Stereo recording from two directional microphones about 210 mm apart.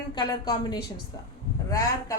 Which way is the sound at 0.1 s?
20° left (ahead or behind).